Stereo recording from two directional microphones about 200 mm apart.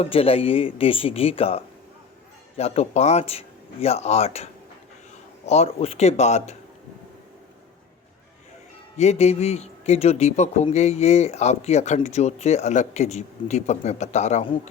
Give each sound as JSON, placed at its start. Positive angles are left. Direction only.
{"t": 0.0, "sound": "a man's voice", "side_deg": 30}
{"t": 5.5, "sound": "a man's voice", "side_deg": 30}
{"t": 9.0, "sound": "a man's voice", "side_deg": 35}